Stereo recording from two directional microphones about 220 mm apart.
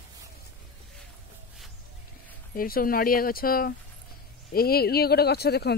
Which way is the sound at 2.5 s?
40° left (ahead or behind).